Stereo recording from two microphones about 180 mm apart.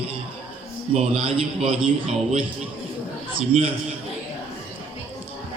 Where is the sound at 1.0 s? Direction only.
30° right (ahead or behind).